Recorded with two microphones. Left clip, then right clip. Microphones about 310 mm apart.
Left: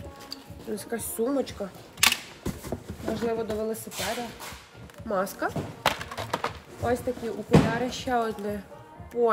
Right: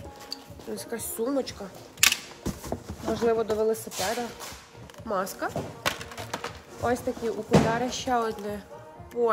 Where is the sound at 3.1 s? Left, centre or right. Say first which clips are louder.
Right 4 dB; centre.